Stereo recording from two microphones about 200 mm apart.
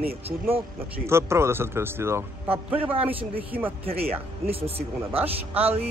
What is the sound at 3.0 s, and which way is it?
Speech, 25° right (ahead or behind).